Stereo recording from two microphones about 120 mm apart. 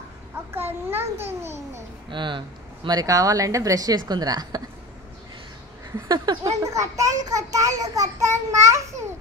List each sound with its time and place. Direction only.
0.5 s a sound: 20° right (ahead or behind)
2.0 s speech: 40° right (ahead or behind)
5.9 s a child's voice: 35° right (ahead or behind)